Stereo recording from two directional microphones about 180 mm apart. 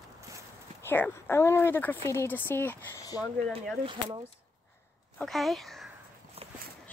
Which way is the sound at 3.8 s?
30° right (ahead or behind).